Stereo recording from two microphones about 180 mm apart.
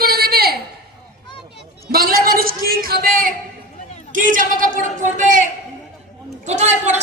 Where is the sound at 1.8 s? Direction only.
55° right (ahead or behind).